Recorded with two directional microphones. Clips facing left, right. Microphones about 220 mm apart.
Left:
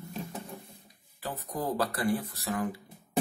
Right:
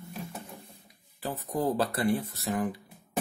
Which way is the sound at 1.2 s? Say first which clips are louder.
Right 4 dB; 30° right (ahead or behind).